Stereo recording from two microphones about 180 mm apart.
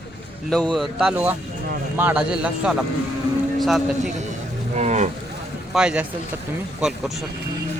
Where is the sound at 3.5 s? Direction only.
Centre (ahead or behind).